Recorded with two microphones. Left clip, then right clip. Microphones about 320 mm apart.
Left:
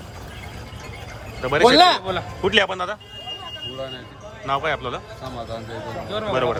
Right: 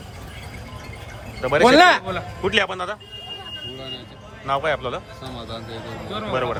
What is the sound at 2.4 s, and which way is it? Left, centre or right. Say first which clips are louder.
Speech: left 2 dB; centre.